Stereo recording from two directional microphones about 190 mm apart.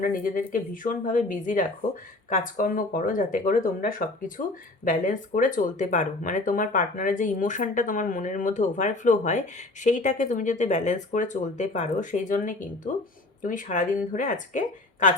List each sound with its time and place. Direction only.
0.0 s speech: 45° left (ahead or behind)